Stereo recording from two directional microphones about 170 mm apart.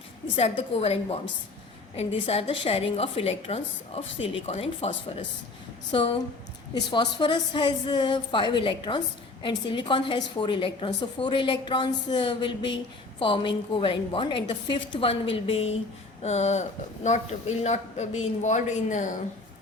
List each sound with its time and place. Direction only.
0.3 s a woman's voice: 35° left (ahead or behind)